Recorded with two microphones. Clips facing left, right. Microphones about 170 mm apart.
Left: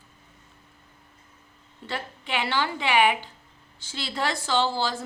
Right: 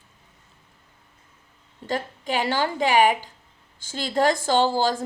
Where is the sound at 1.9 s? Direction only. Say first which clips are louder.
Right 5 dB; 40° right (ahead or behind).